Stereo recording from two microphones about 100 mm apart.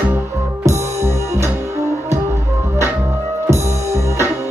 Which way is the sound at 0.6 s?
30° right (ahead or behind).